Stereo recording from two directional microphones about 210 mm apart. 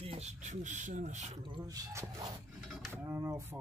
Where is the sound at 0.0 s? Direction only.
30° right (ahead or behind).